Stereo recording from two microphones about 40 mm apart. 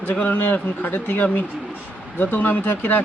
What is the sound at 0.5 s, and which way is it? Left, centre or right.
Speech, left.